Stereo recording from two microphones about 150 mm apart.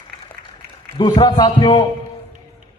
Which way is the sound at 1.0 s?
30° left (ahead or behind).